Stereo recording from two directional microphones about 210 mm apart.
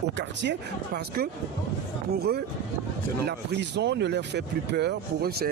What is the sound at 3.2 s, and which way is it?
Speech, 55° right (ahead or behind).